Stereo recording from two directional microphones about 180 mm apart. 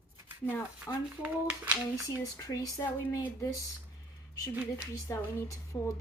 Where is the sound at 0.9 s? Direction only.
15° left (ahead or behind).